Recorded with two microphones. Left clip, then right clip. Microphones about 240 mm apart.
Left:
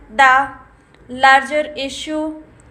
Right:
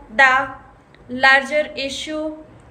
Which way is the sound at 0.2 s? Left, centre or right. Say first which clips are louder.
Left 3 dB; centre.